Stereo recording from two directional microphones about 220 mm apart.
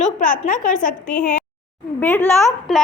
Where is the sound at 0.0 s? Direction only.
35° left (ahead or behind).